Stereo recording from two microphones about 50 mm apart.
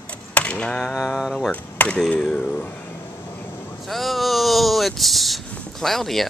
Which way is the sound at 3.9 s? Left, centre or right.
Centre.